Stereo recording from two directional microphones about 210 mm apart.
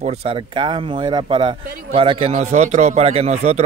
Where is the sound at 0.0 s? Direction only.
30° right (ahead or behind).